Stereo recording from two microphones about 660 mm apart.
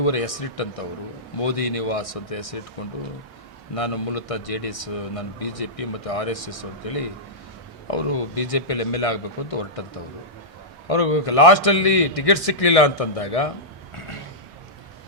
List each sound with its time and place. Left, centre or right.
0.0 s a man's voice: left